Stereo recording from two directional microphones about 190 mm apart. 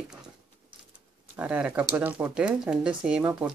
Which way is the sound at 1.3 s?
10° right (ahead or behind).